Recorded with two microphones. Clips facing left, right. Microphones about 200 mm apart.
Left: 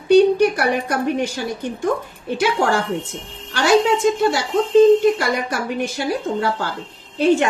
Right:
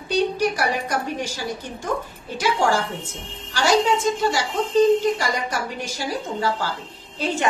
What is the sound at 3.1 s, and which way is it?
Speech, 60° left (ahead or behind).